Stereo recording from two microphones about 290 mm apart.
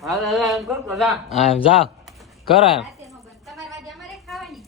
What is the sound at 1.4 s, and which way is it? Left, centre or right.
Speech, centre.